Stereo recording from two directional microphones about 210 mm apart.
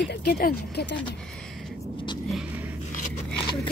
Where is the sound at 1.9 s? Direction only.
20° left (ahead or behind).